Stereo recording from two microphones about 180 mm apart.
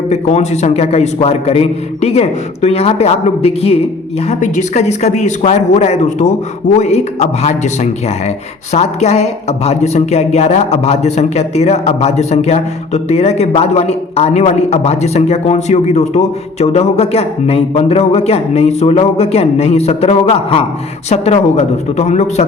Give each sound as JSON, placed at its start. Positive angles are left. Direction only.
{"t": 0.1, "sound": "a woman's voice", "side_deg": 40}